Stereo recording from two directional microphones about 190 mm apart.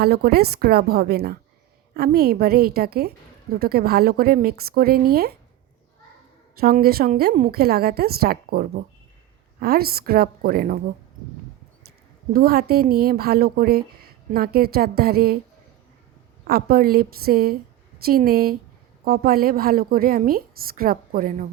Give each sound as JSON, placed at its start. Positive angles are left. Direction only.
{"t": 0.0, "sound": "a woman's voice", "side_deg": -55}
{"t": 6.6, "sound": "a woman's voice", "side_deg": -50}
{"t": 12.3, "sound": "a woman's voice", "side_deg": -55}
{"t": 16.5, "sound": "a woman's voice", "side_deg": -55}